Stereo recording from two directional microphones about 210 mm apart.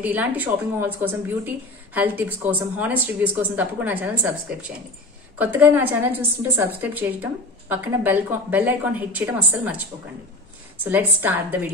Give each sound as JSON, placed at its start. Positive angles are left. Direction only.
{"t": 0.0, "sound": "a woman's voice", "side_deg": -10}
{"t": 10.8, "sound": "a woman's voice", "side_deg": -10}